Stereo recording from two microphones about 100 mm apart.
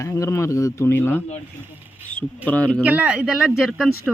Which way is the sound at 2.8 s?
15° right (ahead or behind).